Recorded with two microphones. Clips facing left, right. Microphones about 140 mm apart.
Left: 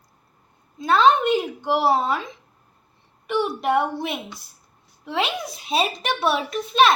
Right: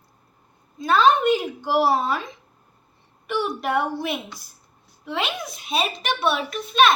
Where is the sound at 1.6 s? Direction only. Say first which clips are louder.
Right 1 dB; 5° right (ahead or behind).